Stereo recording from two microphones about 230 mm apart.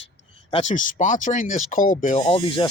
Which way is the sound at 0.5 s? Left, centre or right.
Left.